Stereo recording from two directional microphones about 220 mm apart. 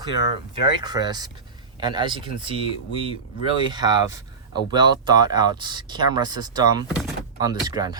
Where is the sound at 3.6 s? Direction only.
20° right (ahead or behind).